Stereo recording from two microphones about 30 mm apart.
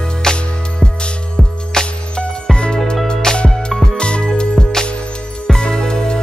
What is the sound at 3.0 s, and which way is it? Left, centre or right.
Music, left.